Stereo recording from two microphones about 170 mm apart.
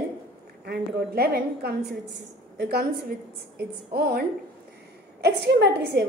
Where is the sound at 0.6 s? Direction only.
70° right (ahead or behind).